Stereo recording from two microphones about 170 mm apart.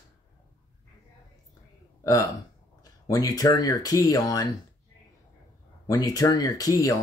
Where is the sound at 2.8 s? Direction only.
20° left (ahead or behind).